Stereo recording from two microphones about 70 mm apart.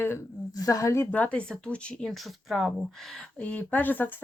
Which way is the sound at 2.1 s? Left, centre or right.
Centre.